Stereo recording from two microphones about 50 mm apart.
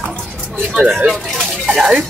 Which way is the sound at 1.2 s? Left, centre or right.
Centre.